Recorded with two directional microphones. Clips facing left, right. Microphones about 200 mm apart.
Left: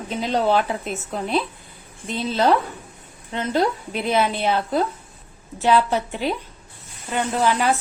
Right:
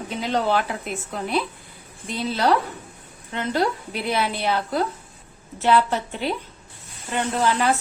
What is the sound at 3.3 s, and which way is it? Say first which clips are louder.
A woman's voice: left 2 dB; 20° left (ahead or behind).